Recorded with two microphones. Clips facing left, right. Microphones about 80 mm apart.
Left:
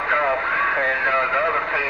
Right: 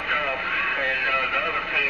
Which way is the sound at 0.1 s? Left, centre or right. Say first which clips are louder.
Left 6 dB; left.